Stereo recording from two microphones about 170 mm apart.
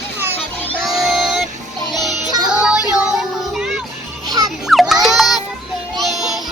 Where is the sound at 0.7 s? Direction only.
Centre (ahead or behind).